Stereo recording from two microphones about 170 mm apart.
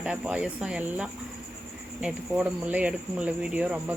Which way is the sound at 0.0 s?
5° right (ahead or behind).